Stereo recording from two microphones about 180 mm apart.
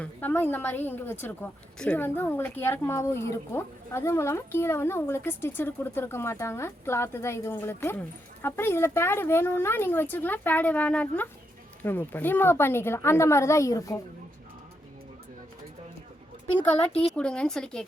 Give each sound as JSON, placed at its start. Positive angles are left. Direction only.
{"t": 0.0, "sound": "a woman's voice", "side_deg": 10}
{"t": 16.6, "sound": "a woman's voice", "side_deg": 10}